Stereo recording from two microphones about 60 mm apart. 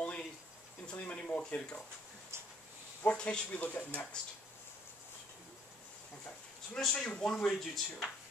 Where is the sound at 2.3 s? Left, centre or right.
Right.